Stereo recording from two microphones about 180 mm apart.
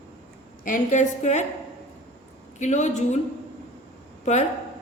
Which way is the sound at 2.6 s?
40° left (ahead or behind).